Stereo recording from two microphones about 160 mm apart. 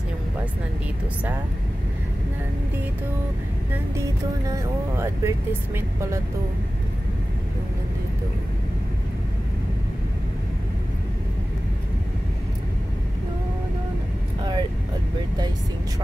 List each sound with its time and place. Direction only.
4.5 s speech: 15° right (ahead or behind)